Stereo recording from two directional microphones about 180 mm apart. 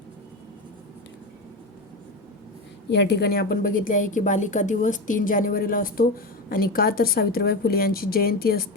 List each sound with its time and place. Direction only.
2.9 s a woman's voice: 70° left (ahead or behind)